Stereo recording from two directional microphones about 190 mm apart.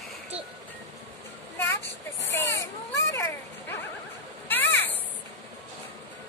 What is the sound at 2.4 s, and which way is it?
Baby cry, 15° left (ahead or behind).